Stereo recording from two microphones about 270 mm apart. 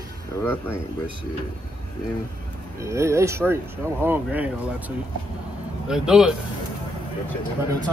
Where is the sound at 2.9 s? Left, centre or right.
Centre.